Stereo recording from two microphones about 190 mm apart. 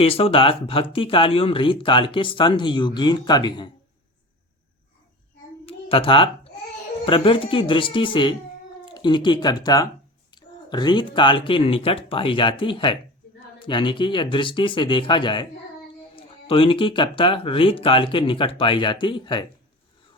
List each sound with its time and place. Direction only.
0.0 s speech: 30° left (ahead or behind)
5.6 s a sound: 30° left (ahead or behind)
7.0 s speech: 25° left (ahead or behind)